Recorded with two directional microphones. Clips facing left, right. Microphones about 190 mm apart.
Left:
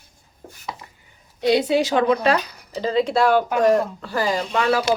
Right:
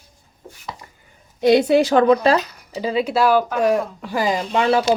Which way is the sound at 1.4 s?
50° right (ahead or behind).